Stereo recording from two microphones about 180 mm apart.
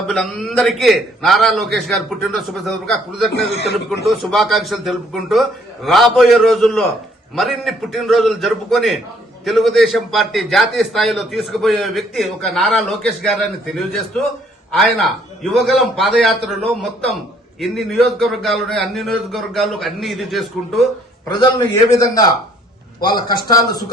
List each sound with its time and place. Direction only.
0.1 s a man's voice: centre (ahead or behind)
3.3 s speech: 70° left (ahead or behind)
4.2 s a man's voice: centre (ahead or behind)
21.2 s a man's voice: 20° left (ahead or behind)